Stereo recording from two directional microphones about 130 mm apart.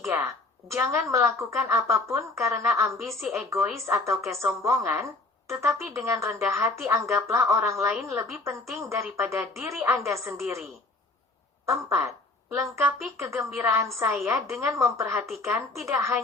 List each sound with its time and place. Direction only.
0.0 s speech: 20° right (ahead or behind)
3.0 s speech: centre (ahead or behind)
3.3 s speech: 20° right (ahead or behind)
11.6 s speech: 25° right (ahead or behind)